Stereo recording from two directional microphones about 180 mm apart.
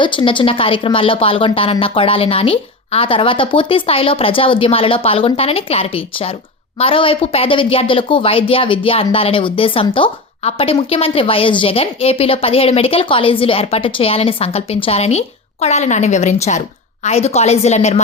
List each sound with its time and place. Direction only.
0.0 s a woman's voice: 30° left (ahead or behind)